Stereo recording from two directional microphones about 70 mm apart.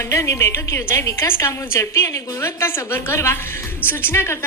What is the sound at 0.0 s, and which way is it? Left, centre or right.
A woman's voice, left.